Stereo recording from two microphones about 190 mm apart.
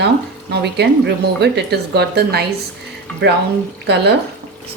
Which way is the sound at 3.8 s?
60° right (ahead or behind).